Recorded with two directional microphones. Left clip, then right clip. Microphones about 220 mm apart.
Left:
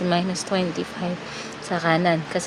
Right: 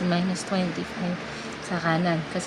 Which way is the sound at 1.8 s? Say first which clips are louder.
Left 5 dB; 45° left (ahead or behind).